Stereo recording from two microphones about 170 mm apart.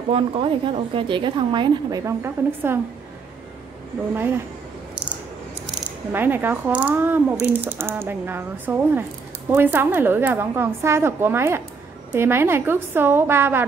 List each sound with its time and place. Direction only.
0.1 s a woman's voice: 30° right (ahead or behind); by 2.8 s 15° right (ahead or behind)
4.1 s speech: 15° right (ahead or behind)
5.9 s speech: 10° right (ahead or behind)